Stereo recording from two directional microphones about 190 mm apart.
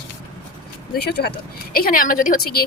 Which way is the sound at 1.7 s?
50° left (ahead or behind).